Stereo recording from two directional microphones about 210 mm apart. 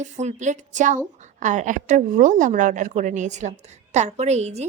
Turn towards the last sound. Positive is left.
turn(degrees=-30)  # may be behind; listen again after turning